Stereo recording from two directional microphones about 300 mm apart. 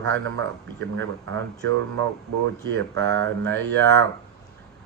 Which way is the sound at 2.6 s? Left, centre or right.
Right.